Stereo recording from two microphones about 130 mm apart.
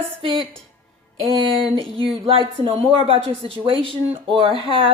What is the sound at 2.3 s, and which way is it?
A woman's voice, 45° right (ahead or behind).